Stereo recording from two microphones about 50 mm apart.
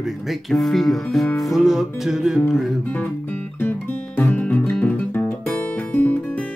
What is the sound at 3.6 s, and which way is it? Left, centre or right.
Music, left.